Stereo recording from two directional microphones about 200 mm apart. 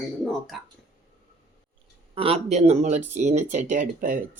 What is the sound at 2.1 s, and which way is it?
Speech, 30° right (ahead or behind).